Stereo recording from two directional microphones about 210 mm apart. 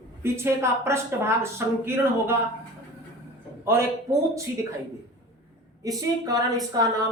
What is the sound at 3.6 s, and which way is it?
Speech, 10° right (ahead or behind).